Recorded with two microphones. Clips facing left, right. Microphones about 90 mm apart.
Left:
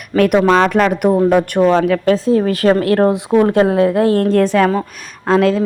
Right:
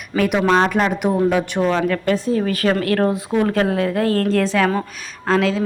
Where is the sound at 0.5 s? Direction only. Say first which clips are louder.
Left 4 dB; 65° left (ahead or behind).